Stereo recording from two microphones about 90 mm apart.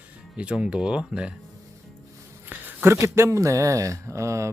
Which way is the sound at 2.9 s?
30° right (ahead or behind).